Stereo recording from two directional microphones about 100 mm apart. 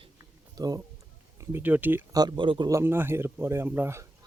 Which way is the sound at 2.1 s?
40° right (ahead or behind).